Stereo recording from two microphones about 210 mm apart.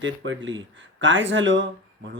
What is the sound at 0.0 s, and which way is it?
Speech, 65° right (ahead or behind).